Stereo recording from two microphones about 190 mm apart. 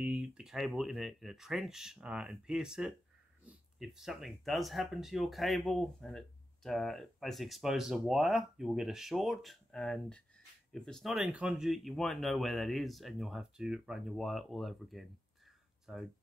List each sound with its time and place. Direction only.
0.0 s speech: 5° right (ahead or behind)